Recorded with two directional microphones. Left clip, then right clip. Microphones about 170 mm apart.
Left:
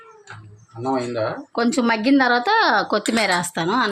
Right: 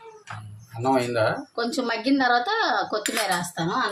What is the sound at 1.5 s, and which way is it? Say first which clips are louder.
Speech: left 6 dB; 70° left (ahead or behind).